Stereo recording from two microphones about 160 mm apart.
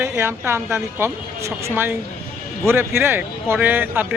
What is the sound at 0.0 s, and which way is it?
A man's voice, 15° right (ahead or behind).